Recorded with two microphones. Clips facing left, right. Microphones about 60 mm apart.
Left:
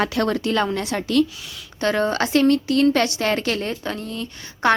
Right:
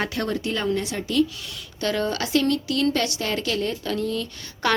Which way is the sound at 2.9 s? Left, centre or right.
Left.